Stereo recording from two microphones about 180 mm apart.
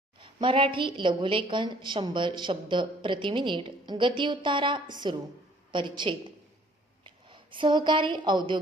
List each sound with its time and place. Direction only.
0.2 s a woman's voice: 25° right (ahead or behind)